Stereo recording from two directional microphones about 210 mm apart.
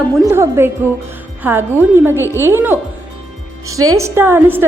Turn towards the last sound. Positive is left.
turn(degrees=-10)  # may be behind; listen again after turning